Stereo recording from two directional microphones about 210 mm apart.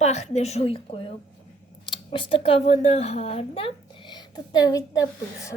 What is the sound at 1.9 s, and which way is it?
Speech, 25° left (ahead or behind).